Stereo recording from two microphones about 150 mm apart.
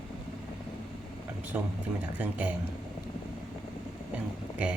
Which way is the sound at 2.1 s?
10° right (ahead or behind).